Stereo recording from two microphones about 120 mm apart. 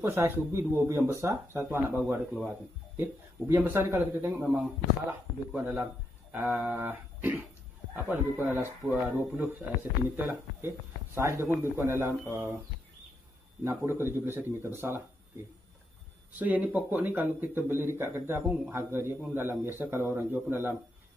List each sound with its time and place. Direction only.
0.0 s a man's voice: 20° right (ahead or behind)
13.7 s speech: 20° right (ahead or behind)
16.3 s a man's voice: 15° right (ahead or behind)